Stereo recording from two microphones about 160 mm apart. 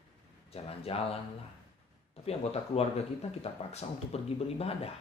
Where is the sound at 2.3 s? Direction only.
40° left (ahead or behind).